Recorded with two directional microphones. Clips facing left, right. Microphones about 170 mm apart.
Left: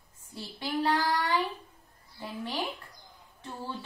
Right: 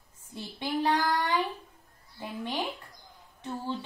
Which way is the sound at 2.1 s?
20° right (ahead or behind).